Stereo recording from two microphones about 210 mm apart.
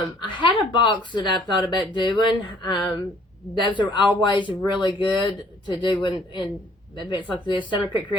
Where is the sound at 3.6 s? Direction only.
20° left (ahead or behind).